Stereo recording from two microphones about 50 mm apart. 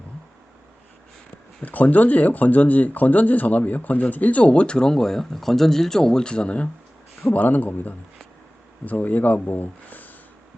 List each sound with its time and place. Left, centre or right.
1.6 s speech: left
7.3 s speech: left